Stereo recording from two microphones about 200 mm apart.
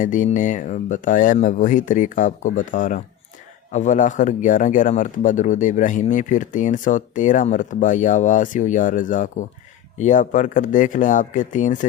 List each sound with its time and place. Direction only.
0.0 s speech: 40° left (ahead or behind)